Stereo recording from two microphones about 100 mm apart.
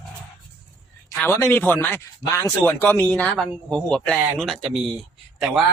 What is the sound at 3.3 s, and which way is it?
A man's voice, 5° left (ahead or behind).